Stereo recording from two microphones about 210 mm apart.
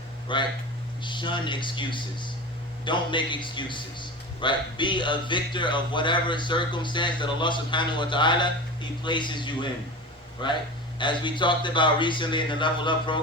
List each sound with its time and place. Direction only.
0.3 s a man's voice: 25° left (ahead or behind)